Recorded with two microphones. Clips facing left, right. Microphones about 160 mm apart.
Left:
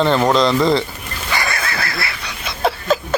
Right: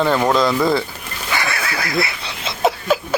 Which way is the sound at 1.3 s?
5° right (ahead or behind).